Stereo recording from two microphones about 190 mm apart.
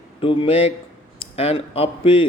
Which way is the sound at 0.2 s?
30° left (ahead or behind).